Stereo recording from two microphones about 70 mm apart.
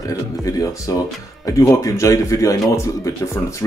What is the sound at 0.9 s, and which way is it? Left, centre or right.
Speech, left.